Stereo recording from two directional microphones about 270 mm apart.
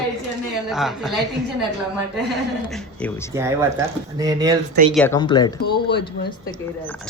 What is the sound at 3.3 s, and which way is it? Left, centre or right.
Speech, centre.